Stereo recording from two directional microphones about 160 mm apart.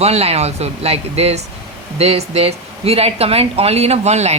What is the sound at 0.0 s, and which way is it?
Speech, 40° right (ahead or behind).